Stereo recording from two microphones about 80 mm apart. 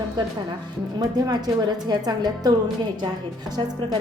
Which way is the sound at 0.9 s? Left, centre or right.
Right.